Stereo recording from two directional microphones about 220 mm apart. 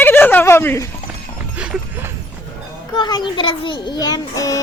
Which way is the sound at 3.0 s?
20° left (ahead or behind).